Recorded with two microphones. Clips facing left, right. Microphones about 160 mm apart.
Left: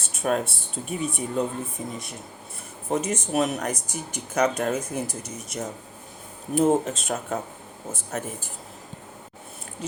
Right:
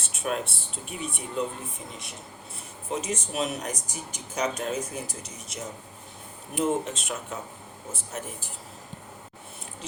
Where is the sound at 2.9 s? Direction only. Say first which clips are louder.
Left 6 dB; 50° left (ahead or behind).